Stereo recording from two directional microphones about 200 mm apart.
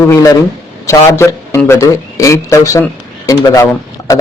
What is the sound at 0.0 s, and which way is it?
A man's voice, 15° left (ahead or behind).